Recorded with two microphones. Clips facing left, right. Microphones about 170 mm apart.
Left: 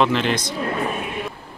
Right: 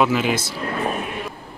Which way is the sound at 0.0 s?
5° right (ahead or behind).